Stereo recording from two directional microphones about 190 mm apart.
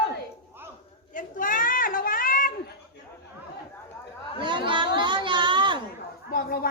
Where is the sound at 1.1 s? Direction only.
45° left (ahead or behind).